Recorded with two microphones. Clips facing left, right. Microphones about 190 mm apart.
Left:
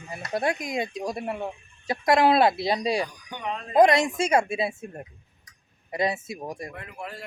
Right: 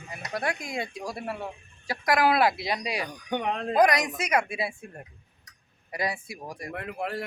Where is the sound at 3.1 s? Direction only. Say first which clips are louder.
Right 4 dB; 60° right (ahead or behind).